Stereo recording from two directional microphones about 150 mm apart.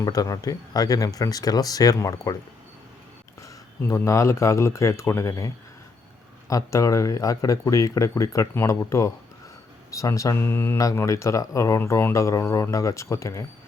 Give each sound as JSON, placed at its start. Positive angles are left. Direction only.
{"t": 0.0, "sound": "speech", "side_deg": 25}
{"t": 3.4, "sound": "speech", "side_deg": 20}
{"t": 6.5, "sound": "speech", "side_deg": 20}